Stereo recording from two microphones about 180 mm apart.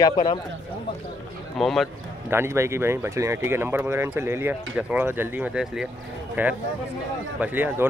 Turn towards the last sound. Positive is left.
turn(degrees=-10)  # may be behind; listen again after turning